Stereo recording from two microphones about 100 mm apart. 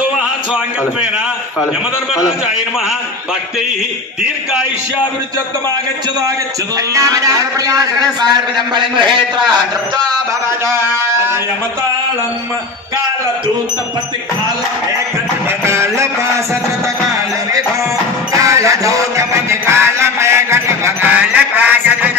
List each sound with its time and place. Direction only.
2.1 s a man's voice: 5° right (ahead or behind)
6.9 s a man's voice: 35° right (ahead or behind); by 9.1 s 50° right (ahead or behind)
15.6 s music: 25° right (ahead or behind)
18.3 s music: 30° right (ahead or behind)
21.1 s a sound: 15° right (ahead or behind)